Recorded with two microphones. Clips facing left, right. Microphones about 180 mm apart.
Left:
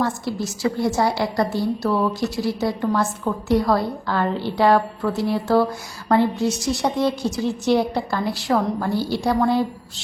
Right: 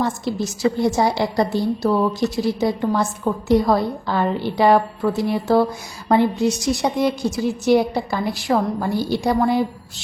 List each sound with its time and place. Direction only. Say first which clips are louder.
0.0 s a woman's voice: right 1 dB; 20° right (ahead or behind)